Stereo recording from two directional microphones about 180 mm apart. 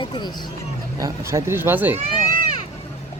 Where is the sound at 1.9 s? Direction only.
50° right (ahead or behind).